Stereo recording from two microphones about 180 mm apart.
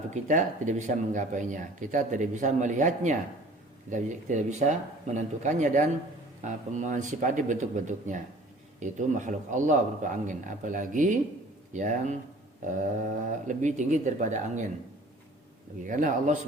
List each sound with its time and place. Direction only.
0.1 s speech: 45° right (ahead or behind)
15.8 s speech: 45° right (ahead or behind)